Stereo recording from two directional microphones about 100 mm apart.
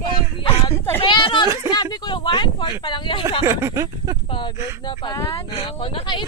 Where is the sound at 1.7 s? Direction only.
45° left (ahead or behind).